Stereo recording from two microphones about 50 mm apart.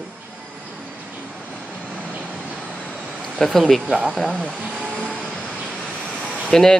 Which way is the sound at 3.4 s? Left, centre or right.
Centre.